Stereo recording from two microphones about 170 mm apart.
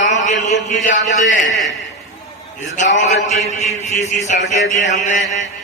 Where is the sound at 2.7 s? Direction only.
45° left (ahead or behind).